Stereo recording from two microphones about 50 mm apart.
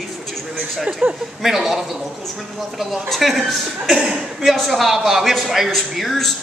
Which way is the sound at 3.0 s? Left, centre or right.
Centre.